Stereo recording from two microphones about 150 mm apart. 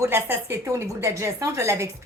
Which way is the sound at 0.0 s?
15° right (ahead or behind).